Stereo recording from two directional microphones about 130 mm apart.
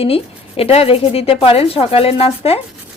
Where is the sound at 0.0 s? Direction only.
50° left (ahead or behind).